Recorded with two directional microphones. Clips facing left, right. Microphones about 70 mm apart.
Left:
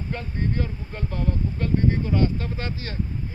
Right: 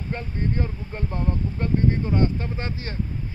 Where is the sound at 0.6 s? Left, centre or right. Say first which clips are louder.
Right 1 dB; right.